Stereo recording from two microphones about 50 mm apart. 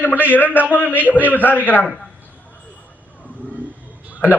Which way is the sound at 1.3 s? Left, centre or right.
Left.